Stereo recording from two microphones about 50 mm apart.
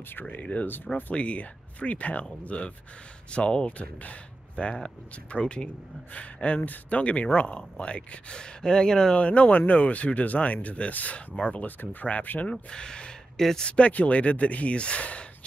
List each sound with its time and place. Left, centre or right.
0.1 s speech: left; by 9.2 s centre
9.2 s speech: left
12.6 s speech: centre
13.4 s speech: centre
13.7 s speech: left